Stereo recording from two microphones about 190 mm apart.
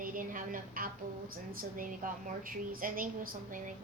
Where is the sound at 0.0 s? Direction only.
45° right (ahead or behind).